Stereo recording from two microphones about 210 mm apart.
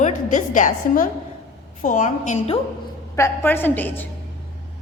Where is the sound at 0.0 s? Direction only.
35° left (ahead or behind).